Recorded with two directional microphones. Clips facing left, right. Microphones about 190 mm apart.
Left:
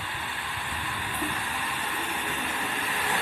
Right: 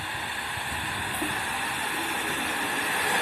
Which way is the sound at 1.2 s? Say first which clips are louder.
Even; 45° right (ahead or behind).